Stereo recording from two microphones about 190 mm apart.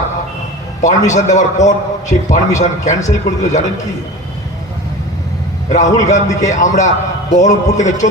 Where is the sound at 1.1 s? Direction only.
40° left (ahead or behind).